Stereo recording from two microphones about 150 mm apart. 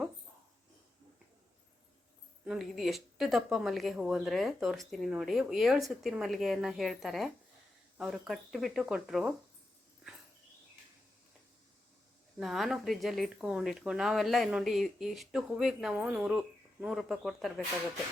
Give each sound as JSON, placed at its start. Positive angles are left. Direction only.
{"t": 2.4, "sound": "speech", "side_deg": -5}
{"t": 12.4, "sound": "speech", "side_deg": 0}